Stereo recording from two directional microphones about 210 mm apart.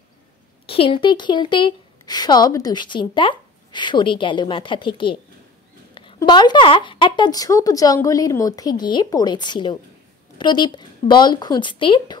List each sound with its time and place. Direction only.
0.7 s speech: 25° left (ahead or behind)